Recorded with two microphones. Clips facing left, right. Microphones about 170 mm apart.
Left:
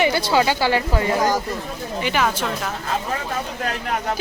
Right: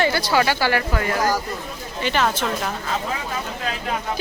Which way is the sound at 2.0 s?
10° left (ahead or behind).